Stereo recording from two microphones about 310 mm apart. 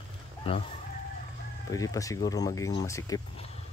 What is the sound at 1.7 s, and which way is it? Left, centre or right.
Speech, centre.